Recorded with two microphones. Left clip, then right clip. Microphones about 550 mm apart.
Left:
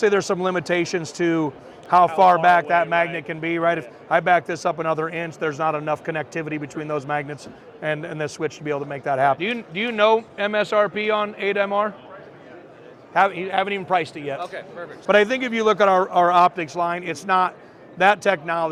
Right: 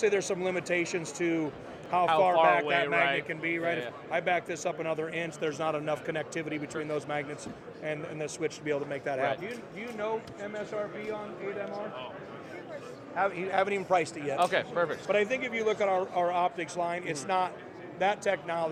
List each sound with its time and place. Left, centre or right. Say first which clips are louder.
0.0 s a man's voice: left 9 dB; left
9.4 s speech: left 14 dB; left
13.1 s a man's voice: left 9 dB; left
14.4 s speech: right 5 dB; right
15.0 s speech: left 10 dB; left